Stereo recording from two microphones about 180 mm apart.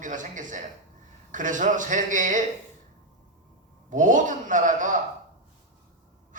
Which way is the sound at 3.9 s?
45° right (ahead or behind).